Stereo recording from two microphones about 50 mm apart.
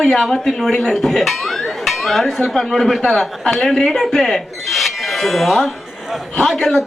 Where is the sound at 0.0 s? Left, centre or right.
Centre.